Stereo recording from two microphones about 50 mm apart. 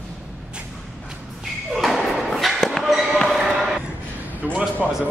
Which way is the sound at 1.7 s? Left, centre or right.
Centre.